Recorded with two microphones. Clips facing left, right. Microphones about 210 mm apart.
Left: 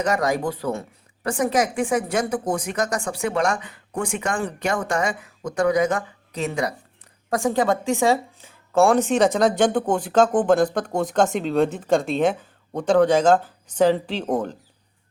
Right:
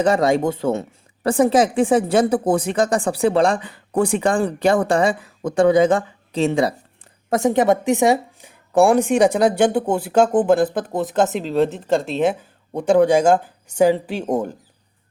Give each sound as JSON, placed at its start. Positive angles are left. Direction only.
{"t": 0.0, "sound": "a woman's voice", "side_deg": -30}